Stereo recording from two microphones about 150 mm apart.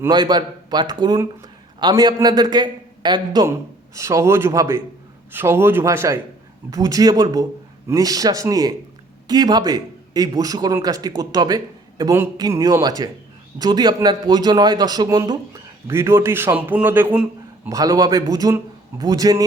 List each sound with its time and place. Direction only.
0.1 s a man's voice: 30° right (ahead or behind)
15.9 s a man's voice: 15° right (ahead or behind)
17.7 s a man's voice: 25° right (ahead or behind)